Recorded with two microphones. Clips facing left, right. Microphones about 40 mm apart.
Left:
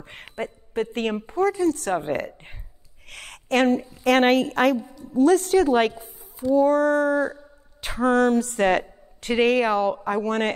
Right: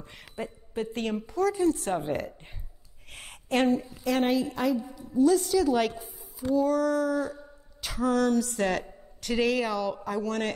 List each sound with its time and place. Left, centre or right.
0.0 s a woman's voice: left
1.5 s a woman's voice: left
2.0 s speech: left
3.1 s a sound: left
4.0 s a woman's voice: left
5.1 s a woman's voice: left